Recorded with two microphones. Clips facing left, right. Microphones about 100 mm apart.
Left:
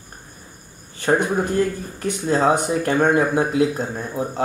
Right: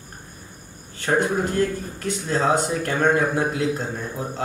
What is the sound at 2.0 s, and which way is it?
Speech, 15° left (ahead or behind).